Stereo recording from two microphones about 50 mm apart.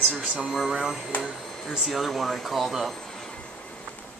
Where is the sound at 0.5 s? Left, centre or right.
Centre.